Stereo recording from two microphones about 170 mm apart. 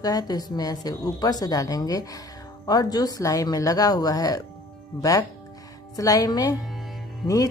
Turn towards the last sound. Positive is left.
turn(degrees=0)  # may be behind; listen again after turning